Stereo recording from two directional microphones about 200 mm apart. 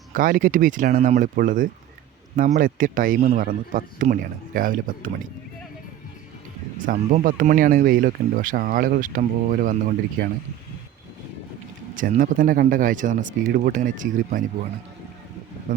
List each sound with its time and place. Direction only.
0.1 s speech: 45° right (ahead or behind)
6.7 s speech: 40° right (ahead or behind)
11.9 s speech: 45° right (ahead or behind)